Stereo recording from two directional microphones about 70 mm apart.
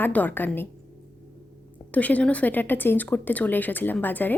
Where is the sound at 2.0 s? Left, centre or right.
Left.